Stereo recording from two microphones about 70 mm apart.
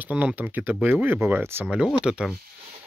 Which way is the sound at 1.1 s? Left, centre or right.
Right.